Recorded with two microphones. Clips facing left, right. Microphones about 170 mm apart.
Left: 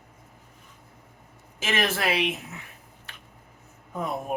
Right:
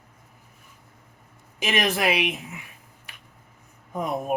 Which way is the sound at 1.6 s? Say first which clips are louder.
Right 3 dB; 15° right (ahead or behind).